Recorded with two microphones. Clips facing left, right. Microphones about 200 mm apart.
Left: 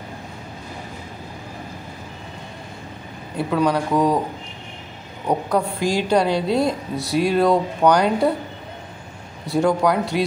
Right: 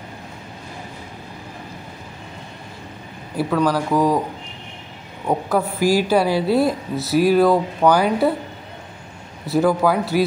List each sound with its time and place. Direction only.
3.4 s a woman's voice: centre (ahead or behind)
5.2 s a woman's voice: centre (ahead or behind)
9.5 s a woman's voice: 5° right (ahead or behind)